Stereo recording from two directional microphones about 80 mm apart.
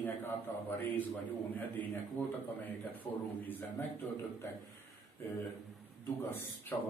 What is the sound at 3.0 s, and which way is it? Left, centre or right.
A man's voice, left.